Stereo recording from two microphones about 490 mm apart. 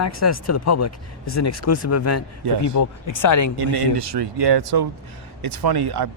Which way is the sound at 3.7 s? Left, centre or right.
Right.